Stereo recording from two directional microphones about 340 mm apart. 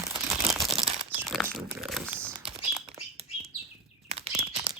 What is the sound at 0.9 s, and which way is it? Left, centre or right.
Speech, centre.